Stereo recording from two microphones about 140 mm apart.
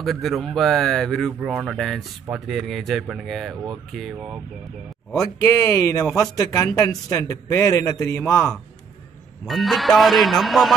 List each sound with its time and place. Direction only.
0.0 s a man's voice: centre (ahead or behind)
5.4 s a man's voice: 20° left (ahead or behind)
9.5 s a man's voice: centre (ahead or behind)